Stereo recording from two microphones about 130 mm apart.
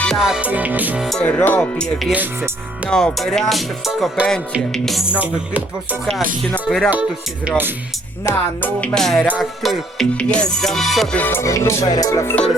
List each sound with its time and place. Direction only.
0.0 s music: centre (ahead or behind)
1.0 s speech: 5° left (ahead or behind)
2.1 s music: 15° right (ahead or behind)
2.9 s music: 5° left (ahead or behind)
6.7 s music: centre (ahead or behind)
7.4 s music: 15° right (ahead or behind)
8.2 s speech: 15° left (ahead or behind)
9.0 s music: centre (ahead or behind)
11.2 s music: 20° left (ahead or behind)